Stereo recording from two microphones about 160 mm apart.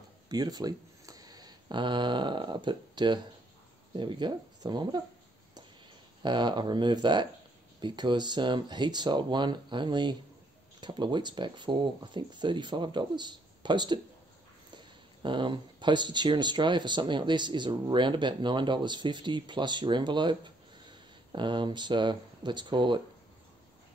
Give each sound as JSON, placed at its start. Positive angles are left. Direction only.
{"t": 0.3, "sound": "speech", "side_deg": -25}
{"t": 6.2, "sound": "speech", "side_deg": -30}